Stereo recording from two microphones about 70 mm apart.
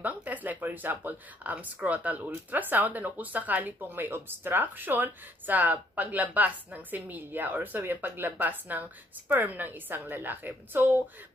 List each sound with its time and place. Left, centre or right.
0.0 s speech: right